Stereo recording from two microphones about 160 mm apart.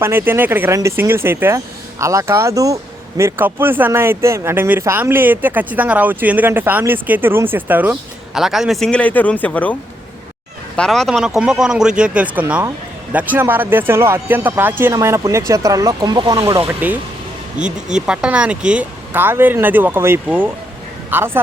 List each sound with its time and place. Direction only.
0.0 s speech: 15° right (ahead or behind); by 9.7 s 10° left (ahead or behind)
10.8 s speech: 5° left (ahead or behind); by 16.6 s 35° right (ahead or behind)
17.6 s speech: 5° right (ahead or behind)